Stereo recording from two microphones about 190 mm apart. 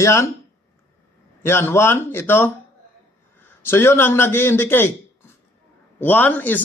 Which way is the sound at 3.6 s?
10° left (ahead or behind).